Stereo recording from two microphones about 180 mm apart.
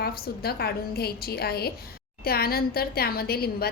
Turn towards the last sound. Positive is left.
turn(degrees=60)  # may be behind; listen again after turning